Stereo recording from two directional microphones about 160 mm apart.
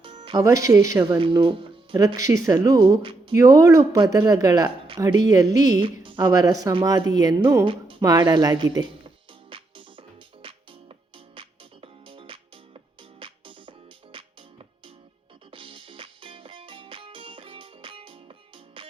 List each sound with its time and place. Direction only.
0.3 s speech: 20° right (ahead or behind)
1.0 s speech: 30° right (ahead or behind)
3.3 s speech: 20° right (ahead or behind)
9.5 s music: 35° right (ahead or behind)
15.4 s music: 30° right (ahead or behind)